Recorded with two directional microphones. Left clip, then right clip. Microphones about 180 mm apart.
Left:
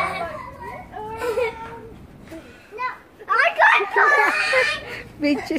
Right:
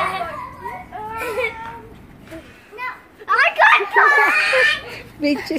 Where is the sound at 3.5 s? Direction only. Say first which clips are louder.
Right 3 dB; 20° right (ahead or behind).